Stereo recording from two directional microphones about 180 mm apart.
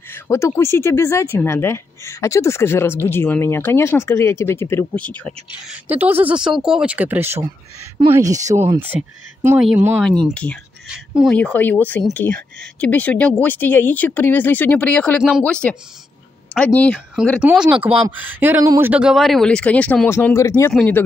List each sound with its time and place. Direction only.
0.1 s speech: 15° left (ahead or behind)
5.7 s speech: 10° right (ahead or behind)
10.2 s speech: 5° left (ahead or behind)